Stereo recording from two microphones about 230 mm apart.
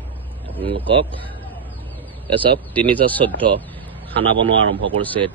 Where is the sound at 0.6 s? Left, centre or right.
Right.